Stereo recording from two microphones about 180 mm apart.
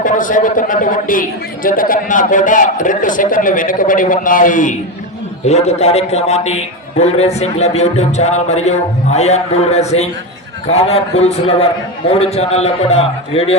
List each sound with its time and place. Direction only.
0.0 s a man's voice: 45° left (ahead or behind)